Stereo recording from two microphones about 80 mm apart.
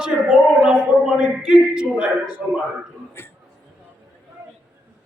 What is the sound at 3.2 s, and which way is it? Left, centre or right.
Speech, left.